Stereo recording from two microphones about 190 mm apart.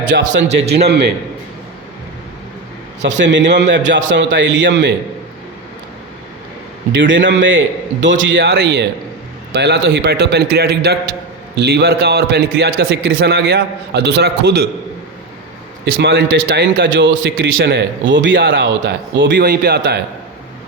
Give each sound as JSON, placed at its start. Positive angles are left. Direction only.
{"t": 0.1, "sound": "a man's voice", "side_deg": -65}
{"t": 3.2, "sound": "a man's voice", "side_deg": -70}
{"t": 6.9, "sound": "a man's voice", "side_deg": -75}
{"t": 16.0, "sound": "a man's voice", "side_deg": -65}